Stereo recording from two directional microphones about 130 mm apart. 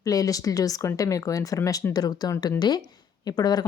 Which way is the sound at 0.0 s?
25° left (ahead or behind).